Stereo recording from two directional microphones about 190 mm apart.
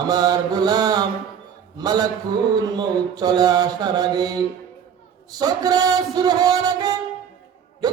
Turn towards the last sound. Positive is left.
turn(degrees=-20)  # may be behind; listen again after turning